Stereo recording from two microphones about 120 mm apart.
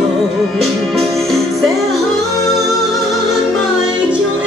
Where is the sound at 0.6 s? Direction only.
Centre (ahead or behind).